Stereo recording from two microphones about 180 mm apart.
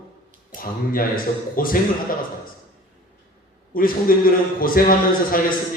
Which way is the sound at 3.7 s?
50° left (ahead or behind).